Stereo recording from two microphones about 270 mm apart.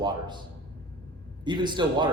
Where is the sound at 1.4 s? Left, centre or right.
Centre.